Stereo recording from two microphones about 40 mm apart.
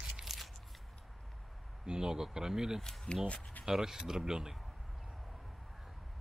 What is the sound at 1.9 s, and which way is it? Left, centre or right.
Speech, centre.